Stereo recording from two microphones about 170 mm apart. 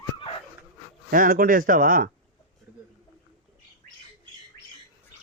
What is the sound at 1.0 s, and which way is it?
Speech, 55° right (ahead or behind).